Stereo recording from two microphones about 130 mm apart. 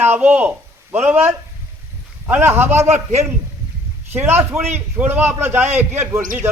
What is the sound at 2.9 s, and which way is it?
Speech, 60° right (ahead or behind).